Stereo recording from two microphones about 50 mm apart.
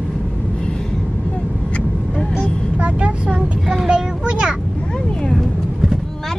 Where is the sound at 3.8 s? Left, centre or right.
Centre.